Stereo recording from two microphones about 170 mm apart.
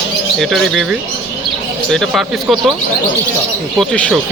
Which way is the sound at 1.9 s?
Centre (ahead or behind).